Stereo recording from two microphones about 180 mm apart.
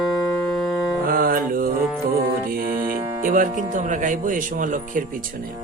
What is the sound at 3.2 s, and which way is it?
Speech, 50° right (ahead or behind).